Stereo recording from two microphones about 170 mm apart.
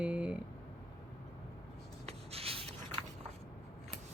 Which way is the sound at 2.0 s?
35° right (ahead or behind).